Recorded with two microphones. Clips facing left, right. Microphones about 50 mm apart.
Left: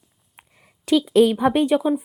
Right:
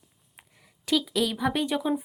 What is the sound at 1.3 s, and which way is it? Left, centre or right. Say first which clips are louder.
Speech: left 8 dB; left.